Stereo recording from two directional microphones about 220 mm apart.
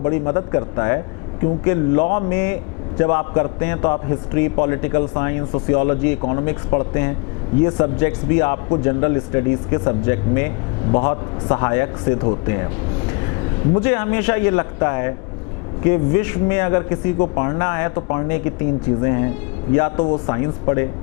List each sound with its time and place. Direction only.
0.0 s speech: 20° left (ahead or behind)
13.7 s speech: 15° left (ahead or behind)